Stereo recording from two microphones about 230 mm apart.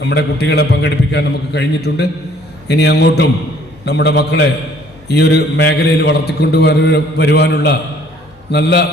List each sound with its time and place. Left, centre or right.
0.0 s a man's voice: left